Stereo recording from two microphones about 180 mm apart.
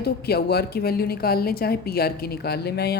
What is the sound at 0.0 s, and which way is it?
A woman's voice, 60° left (ahead or behind).